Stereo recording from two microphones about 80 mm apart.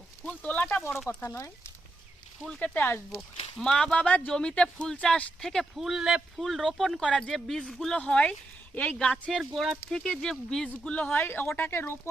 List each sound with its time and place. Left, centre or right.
0.3 s speech: centre
0.8 s speech: centre
1.0 s speech: left
2.5 s speech: centre
2.7 s speech: left
3.6 s speech: centre
5.7 s speech: centre
9.6 s speech: centre
10.7 s speech: centre